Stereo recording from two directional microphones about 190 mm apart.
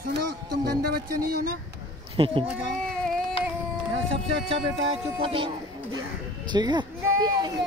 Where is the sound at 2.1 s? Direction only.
25° right (ahead or behind).